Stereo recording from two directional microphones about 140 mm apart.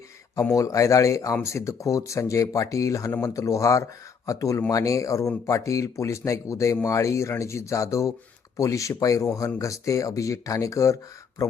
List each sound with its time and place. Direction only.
0.5 s speech: 25° left (ahead or behind)